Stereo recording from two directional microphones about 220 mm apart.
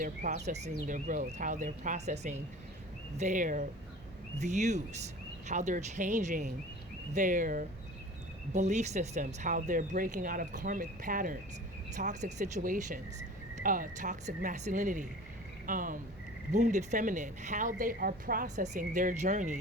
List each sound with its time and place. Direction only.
0.0 s a woman's voice: 35° right (ahead or behind)